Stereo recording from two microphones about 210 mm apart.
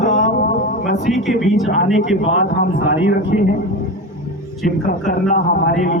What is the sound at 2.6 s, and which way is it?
Speech, 50° left (ahead or behind).